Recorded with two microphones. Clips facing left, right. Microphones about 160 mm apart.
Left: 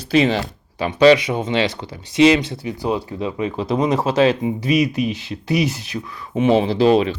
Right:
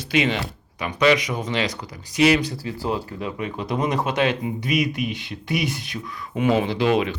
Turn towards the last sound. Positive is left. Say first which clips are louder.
# left 5 dB
turn(degrees=30)  # may be behind; listen again after turning